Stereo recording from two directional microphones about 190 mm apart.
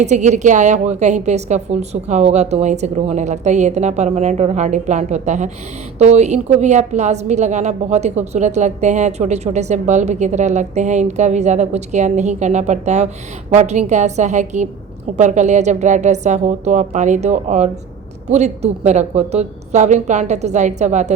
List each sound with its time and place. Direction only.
0.0 s a woman's voice: 40° right (ahead or behind)